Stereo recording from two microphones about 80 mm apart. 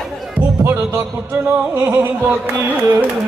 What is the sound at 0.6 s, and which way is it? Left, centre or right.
Music, right.